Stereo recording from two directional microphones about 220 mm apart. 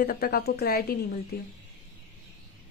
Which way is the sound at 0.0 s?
40° left (ahead or behind).